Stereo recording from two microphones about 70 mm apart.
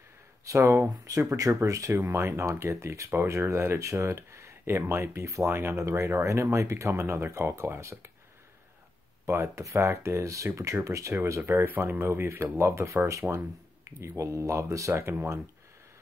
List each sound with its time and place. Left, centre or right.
0.5 s speech: right
9.2 s speech: right
11.4 s speech: right